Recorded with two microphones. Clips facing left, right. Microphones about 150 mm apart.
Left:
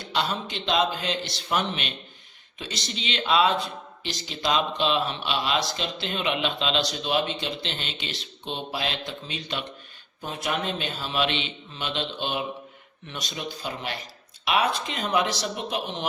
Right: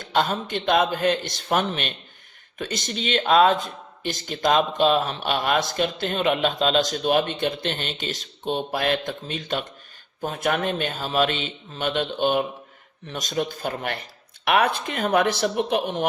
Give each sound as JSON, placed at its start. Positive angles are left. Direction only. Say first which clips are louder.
{"t": 0.0, "sound": "speech", "louder": "right 5 dB", "side_deg": -50}